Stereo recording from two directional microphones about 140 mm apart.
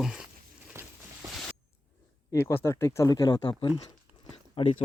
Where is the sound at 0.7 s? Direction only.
20° right (ahead or behind).